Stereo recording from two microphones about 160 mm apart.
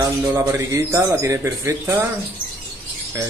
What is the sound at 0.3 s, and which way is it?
Speech, 20° right (ahead or behind).